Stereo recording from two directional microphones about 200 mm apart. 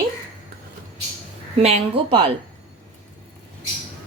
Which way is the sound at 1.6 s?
30° right (ahead or behind).